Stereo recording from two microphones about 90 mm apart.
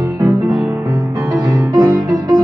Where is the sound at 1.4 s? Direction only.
45° right (ahead or behind).